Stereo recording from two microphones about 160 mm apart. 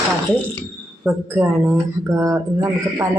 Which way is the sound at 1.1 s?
10° right (ahead or behind).